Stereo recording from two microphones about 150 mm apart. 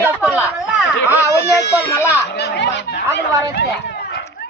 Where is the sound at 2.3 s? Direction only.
90° left.